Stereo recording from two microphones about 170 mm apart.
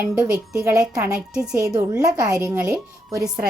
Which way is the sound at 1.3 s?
5° right (ahead or behind).